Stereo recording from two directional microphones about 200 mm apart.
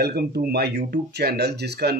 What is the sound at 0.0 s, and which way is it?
Speech, 50° right (ahead or behind).